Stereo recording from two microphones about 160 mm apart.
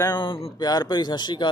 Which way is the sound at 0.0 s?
25° left (ahead or behind).